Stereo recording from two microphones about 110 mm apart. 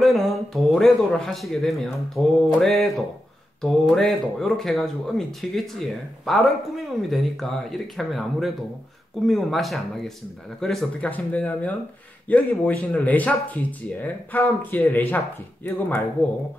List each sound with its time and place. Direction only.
0.0 s a man's voice: centre (ahead or behind)
11.1 s speech: 15° left (ahead or behind)